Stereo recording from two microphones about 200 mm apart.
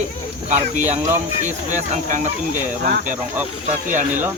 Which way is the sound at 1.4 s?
40° right (ahead or behind).